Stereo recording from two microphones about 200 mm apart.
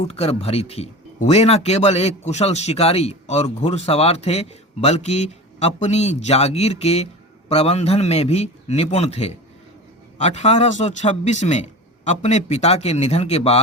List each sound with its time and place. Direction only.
0.1 s speech: 30° left (ahead or behind)